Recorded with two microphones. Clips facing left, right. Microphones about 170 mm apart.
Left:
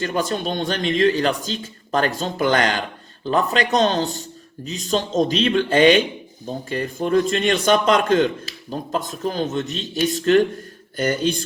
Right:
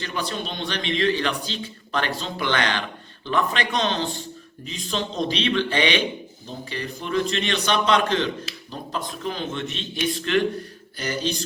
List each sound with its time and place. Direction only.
0.0 s a man's voice: 45° left (ahead or behind)